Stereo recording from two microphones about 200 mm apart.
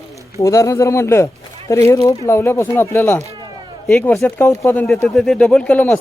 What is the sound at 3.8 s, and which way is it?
Speech, 5° left (ahead or behind).